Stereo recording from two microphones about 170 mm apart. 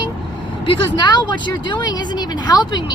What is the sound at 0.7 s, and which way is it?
Speech, 25° left (ahead or behind).